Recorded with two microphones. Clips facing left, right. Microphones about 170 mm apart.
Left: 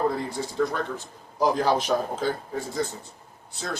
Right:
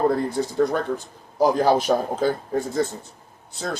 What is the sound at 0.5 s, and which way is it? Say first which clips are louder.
A man's voice: right 3 dB; 50° right (ahead or behind).